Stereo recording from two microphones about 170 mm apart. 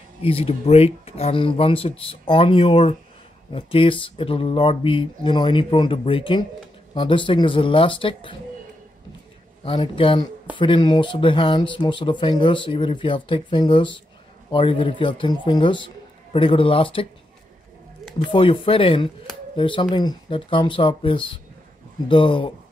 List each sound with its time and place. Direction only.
0.2 s speech: 35° left (ahead or behind)
9.7 s speech: 30° left (ahead or behind)
18.2 s speech: 30° left (ahead or behind)